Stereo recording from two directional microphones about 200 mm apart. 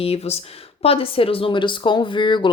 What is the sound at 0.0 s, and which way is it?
Speech, 30° left (ahead or behind).